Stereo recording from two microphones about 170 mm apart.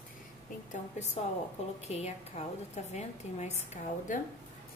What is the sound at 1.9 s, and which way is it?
A woman's voice, 40° left (ahead or behind).